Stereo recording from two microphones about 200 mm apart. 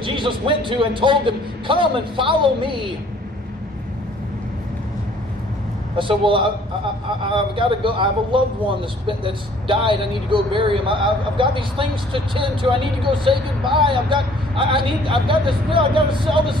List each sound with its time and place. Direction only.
0.0 s speech: 25° right (ahead or behind)
5.9 s speech: 25° right (ahead or behind)